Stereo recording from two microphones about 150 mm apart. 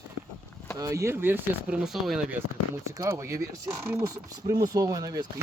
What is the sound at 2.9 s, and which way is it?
Speech, 20° right (ahead or behind).